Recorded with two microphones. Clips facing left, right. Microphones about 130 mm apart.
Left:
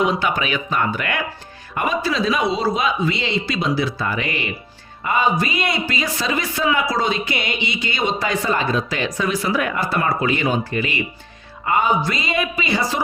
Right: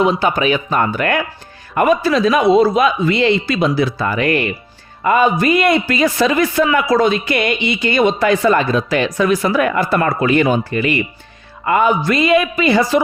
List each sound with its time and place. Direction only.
0.0 s a man's voice: 35° right (ahead or behind); by 13.0 s 60° right (ahead or behind)